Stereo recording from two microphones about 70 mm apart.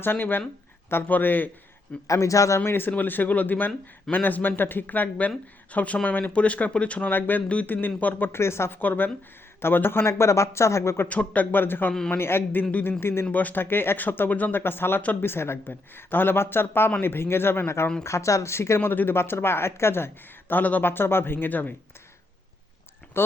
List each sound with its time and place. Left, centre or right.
0.0 s speech: left
2.0 s a man's voice: left
2.6 s speech: left
8.4 s speech: left
8.8 s speech: left
11.1 s speech: left
13.0 s speech: left
13.3 s speech: left
20.5 s speech: left
23.2 s speech: left